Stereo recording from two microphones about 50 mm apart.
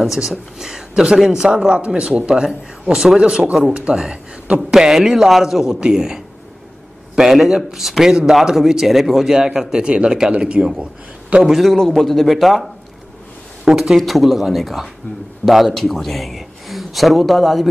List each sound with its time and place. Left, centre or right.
0.0 s speech: centre
11.4 s speech: centre
13.7 s speech: centre